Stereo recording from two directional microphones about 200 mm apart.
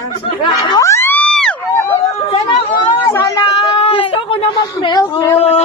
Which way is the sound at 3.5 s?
30° left (ahead or behind).